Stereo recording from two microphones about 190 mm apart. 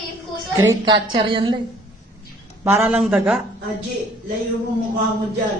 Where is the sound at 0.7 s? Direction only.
20° right (ahead or behind).